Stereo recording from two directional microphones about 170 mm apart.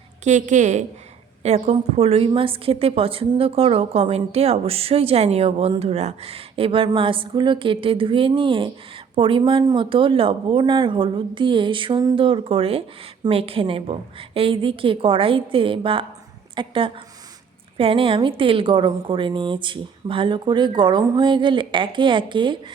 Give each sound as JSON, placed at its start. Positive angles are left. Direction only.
{"t": 0.3, "sound": "a woman's voice", "side_deg": -45}